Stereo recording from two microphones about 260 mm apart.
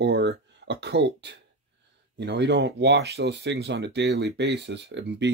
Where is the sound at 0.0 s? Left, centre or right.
Right.